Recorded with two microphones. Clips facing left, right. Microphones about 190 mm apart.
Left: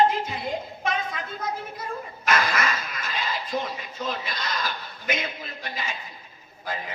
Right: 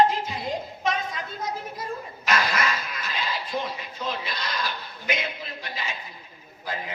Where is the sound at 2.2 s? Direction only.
50° left (ahead or behind).